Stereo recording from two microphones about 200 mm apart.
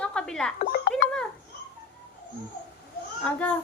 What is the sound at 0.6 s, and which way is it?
Speech, 50° left (ahead or behind).